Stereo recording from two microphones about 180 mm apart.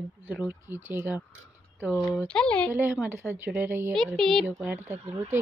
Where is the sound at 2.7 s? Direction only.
10° right (ahead or behind).